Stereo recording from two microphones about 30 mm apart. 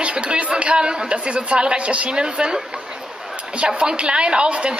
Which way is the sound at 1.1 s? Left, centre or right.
Right.